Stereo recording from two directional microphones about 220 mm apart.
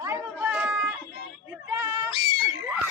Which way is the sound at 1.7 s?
15° right (ahead or behind).